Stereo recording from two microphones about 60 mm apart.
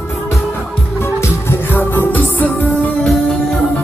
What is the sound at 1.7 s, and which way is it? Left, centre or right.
Music, left.